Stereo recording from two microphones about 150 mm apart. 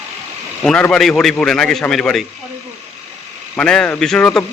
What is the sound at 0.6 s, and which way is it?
A man's voice, 5° left (ahead or behind).